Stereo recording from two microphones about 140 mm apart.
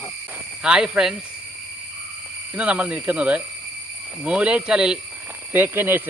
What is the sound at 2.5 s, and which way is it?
Speech, 10° right (ahead or behind).